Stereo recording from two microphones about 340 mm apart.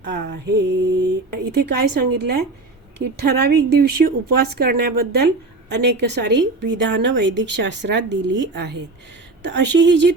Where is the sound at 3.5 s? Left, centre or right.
Right.